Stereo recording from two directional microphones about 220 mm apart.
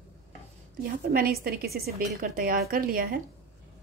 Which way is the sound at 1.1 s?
40° right (ahead or behind).